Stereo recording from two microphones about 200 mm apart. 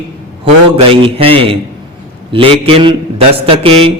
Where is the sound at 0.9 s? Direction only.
25° right (ahead or behind).